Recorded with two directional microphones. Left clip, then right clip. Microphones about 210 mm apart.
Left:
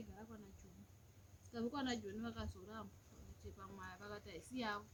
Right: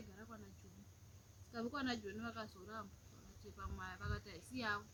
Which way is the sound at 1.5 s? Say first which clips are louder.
Even; 10° left (ahead or behind).